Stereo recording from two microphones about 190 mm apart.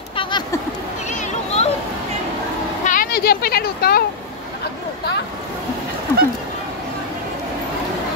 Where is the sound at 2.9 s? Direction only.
50° left (ahead or behind).